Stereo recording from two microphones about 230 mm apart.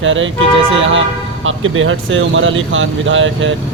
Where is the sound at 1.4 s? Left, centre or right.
Right.